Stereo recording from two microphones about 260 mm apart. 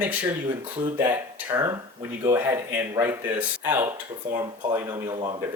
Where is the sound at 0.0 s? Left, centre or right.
Centre.